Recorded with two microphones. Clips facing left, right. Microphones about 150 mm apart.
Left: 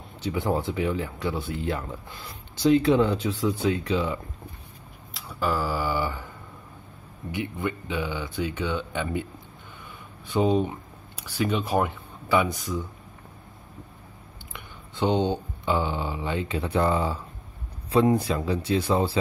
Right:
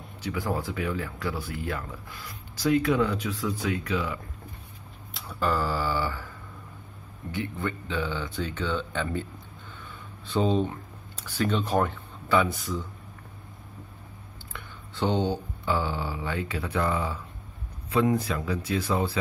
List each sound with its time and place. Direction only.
0.2 s speech: 25° left (ahead or behind)
5.1 s speech: 5° left (ahead or behind)
10.2 s speech: 15° left (ahead or behind)
14.5 s speech: 15° left (ahead or behind)